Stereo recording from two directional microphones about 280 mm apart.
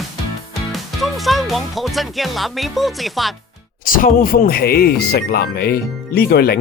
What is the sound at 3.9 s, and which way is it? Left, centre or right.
Speech, left.